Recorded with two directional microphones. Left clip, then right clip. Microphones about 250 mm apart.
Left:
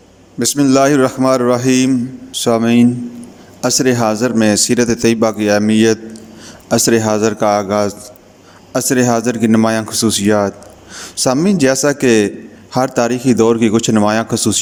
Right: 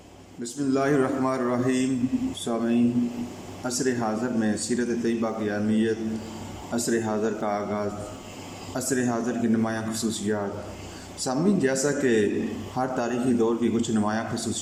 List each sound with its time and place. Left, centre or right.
0.3 s a man's voice: left